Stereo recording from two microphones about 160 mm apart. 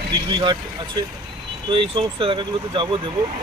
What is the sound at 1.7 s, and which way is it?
Speech, 30° right (ahead or behind).